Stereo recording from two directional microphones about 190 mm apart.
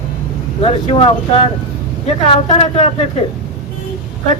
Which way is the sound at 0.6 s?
30° left (ahead or behind).